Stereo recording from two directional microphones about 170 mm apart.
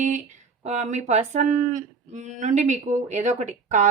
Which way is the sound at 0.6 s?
45° right (ahead or behind).